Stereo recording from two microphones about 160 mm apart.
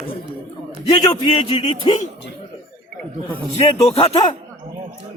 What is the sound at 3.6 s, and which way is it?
Speech, 40° left (ahead or behind).